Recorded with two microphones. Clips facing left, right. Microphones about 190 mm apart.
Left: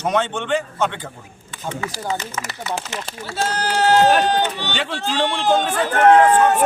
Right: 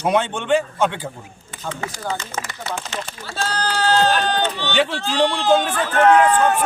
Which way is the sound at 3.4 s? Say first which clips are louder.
Left 2 dB; 20° left (ahead or behind).